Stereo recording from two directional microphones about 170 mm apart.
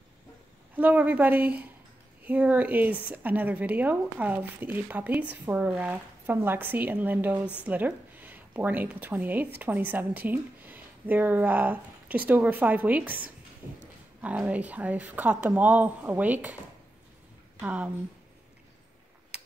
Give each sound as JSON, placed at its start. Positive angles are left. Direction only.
{"t": 0.7, "sound": "a woman's voice", "side_deg": -10}
{"t": 17.6, "sound": "a woman's voice", "side_deg": -10}
{"t": 19.3, "sound": "computer keyboard", "side_deg": -5}